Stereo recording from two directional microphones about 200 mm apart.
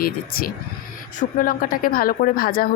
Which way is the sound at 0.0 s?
50° left (ahead or behind).